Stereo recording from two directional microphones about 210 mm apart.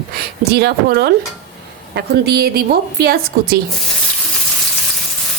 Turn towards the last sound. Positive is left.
turn(degrees=-45)  # may be behind; listen again after turning